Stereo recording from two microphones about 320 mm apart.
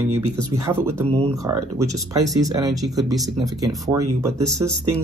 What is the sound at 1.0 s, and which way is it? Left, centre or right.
Speech, centre.